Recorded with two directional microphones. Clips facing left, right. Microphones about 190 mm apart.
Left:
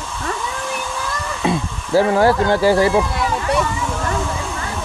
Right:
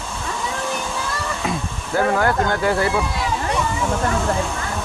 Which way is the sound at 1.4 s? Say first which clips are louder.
Left 5 dB; 30° left (ahead or behind).